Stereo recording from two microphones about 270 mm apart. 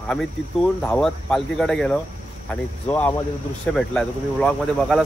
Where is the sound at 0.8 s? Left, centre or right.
Centre.